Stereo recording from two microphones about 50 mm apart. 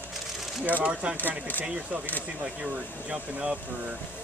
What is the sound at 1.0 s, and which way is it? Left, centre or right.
Speech, right.